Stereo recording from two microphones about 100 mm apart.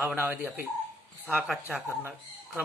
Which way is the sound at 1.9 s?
20° right (ahead or behind).